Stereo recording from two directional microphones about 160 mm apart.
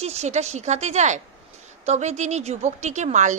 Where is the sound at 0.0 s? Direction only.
45° right (ahead or behind).